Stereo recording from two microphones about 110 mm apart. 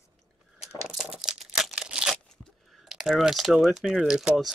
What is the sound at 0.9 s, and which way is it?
Crumpling, 5° right (ahead or behind).